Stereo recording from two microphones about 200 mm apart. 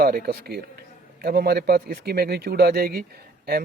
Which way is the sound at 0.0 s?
50° right (ahead or behind).